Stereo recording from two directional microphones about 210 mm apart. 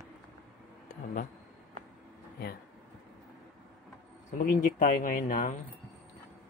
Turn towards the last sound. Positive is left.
turn(degrees=40)  # may be behind; listen again after turning